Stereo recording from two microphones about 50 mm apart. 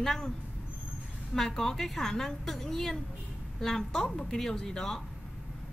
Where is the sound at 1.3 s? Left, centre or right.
Centre.